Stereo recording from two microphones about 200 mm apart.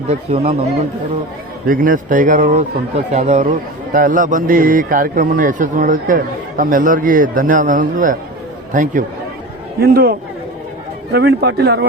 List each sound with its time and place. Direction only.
0.1 s speech: 35° right (ahead or behind)
1.6 s a man's voice: 45° right (ahead or behind)
9.8 s a man's voice: 50° right (ahead or behind)